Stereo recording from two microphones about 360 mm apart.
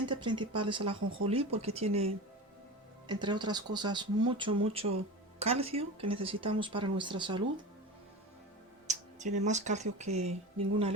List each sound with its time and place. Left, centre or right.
0.0 s speech: centre
8.9 s speech: centre